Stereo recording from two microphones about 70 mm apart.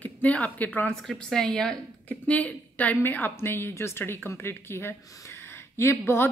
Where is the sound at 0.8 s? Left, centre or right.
Centre.